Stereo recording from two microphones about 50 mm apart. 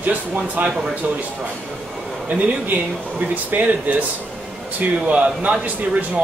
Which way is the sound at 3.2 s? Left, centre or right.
Right.